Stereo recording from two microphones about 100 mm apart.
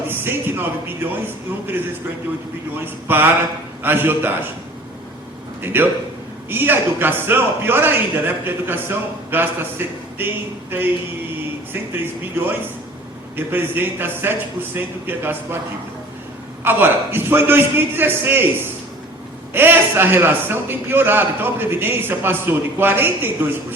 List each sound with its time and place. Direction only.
0.1 s a man's voice: 20° right (ahead or behind)
5.6 s a man's voice: 20° right (ahead or behind)
16.6 s a man's voice: 20° right (ahead or behind)